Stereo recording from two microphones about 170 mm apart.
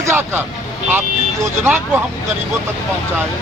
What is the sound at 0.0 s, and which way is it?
Vehicle, 15° right (ahead or behind).